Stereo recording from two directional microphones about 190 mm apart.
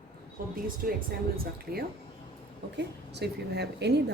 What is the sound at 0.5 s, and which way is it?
Speech, 50° right (ahead or behind).